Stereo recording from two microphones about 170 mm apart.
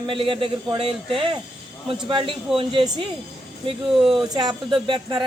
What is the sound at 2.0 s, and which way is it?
Speech, 30° right (ahead or behind).